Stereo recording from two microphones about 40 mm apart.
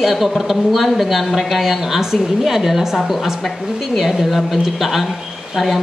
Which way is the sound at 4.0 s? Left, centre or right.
Centre.